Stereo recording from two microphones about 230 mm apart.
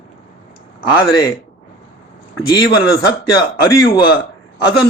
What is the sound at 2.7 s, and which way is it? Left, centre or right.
Speech, centre.